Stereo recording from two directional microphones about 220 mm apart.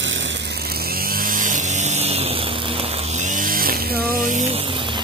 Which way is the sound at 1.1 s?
40° right (ahead or behind).